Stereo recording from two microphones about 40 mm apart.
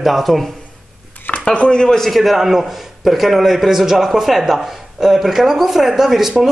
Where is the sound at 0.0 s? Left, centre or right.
Centre.